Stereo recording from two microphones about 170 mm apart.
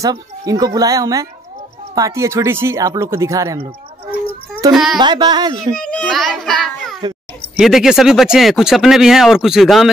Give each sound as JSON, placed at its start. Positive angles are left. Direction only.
{"t": 0.0, "sound": "speech", "side_deg": -20}
{"t": 4.9, "sound": "speech", "side_deg": -25}
{"t": 5.8, "sound": "a child's voice", "side_deg": 5}